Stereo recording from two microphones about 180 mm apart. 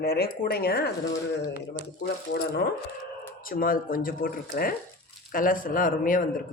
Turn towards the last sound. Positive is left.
turn(degrees=50)  # may be behind; listen again after turning